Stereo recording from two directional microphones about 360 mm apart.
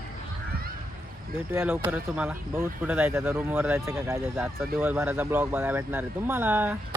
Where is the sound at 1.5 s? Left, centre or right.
Centre.